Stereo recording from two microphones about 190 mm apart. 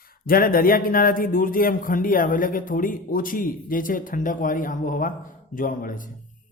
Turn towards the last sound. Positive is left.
turn(degrees=45)  # may be behind; listen again after turning